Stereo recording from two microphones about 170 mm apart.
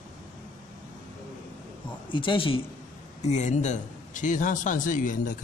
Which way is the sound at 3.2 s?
45° left (ahead or behind).